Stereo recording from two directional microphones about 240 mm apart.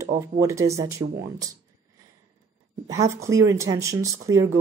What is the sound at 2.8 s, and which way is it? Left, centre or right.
Speech, centre.